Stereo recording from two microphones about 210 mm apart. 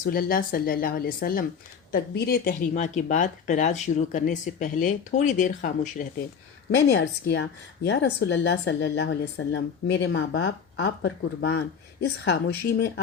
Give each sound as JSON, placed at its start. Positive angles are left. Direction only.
{"t": 0.0, "sound": "speech", "side_deg": 45}
{"t": 6.7, "sound": "a woman's voice", "side_deg": 50}